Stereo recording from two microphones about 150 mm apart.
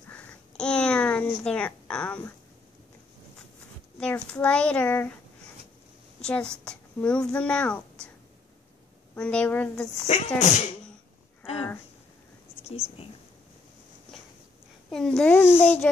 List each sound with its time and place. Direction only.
0.1 s a sound: 10° left (ahead or behind)
4.0 s speech: 10° left (ahead or behind)
6.2 s a child's voice: 5° left (ahead or behind)
9.1 s speech: 10° left (ahead or behind)
10.0 s speech: 45° left (ahead or behind)
14.9 s a child's voice: 5° left (ahead or behind)
15.3 s speech: 15° left (ahead or behind)